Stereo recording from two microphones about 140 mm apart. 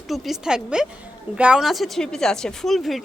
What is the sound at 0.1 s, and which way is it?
Speech, 5° right (ahead or behind).